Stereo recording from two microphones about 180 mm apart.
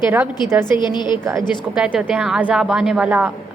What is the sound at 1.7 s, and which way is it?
A woman's voice, 5° right (ahead or behind).